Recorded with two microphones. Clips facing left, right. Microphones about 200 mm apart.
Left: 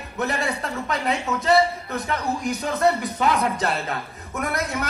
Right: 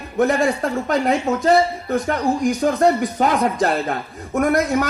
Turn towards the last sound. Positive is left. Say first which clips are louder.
# right 9 dB
turn(degrees=-45)  # may be behind; listen again after turning